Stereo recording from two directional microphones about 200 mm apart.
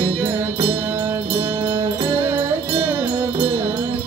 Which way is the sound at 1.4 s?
25° right (ahead or behind).